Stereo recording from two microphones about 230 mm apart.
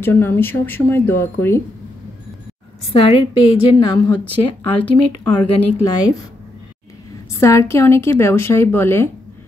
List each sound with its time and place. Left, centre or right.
0.0 s a woman's voice: centre
2.9 s a woman's voice: left
4.8 s speech: centre
5.8 s a woman's voice: centre
7.3 s a woman's voice: centre